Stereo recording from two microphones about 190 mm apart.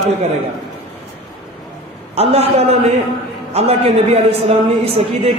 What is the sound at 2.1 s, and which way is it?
A man's voice, 30° right (ahead or behind).